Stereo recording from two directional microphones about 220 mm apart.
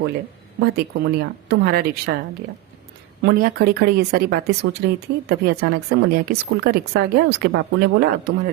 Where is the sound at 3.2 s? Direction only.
45° right (ahead or behind).